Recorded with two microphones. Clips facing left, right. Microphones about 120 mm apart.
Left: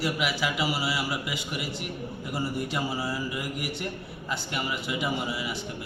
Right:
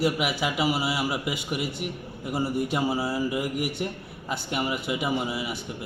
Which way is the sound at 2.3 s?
25° right (ahead or behind).